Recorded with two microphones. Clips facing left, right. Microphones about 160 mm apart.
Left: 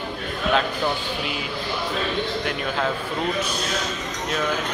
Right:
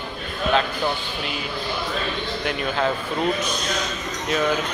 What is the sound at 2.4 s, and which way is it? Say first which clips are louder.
Speech: right 1 dB; centre (ahead or behind).